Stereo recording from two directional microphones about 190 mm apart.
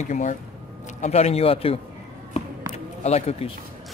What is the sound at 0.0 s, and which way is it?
A man's voice, 40° left (ahead or behind).